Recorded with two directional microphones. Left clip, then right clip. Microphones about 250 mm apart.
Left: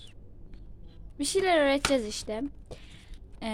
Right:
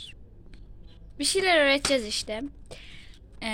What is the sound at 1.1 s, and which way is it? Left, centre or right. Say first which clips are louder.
Speech: right 2 dB; centre.